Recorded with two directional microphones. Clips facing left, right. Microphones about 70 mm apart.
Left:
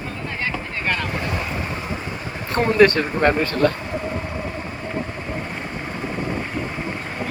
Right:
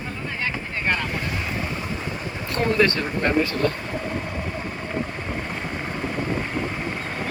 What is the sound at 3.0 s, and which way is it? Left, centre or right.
Speech, left.